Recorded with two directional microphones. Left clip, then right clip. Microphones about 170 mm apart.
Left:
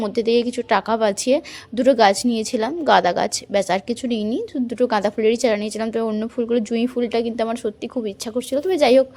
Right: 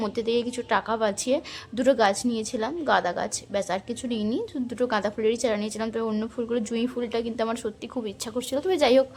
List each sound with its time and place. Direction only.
0.0 s a woman's voice: 30° left (ahead or behind)